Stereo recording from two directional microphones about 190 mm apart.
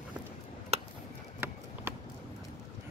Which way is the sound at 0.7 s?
35° right (ahead or behind).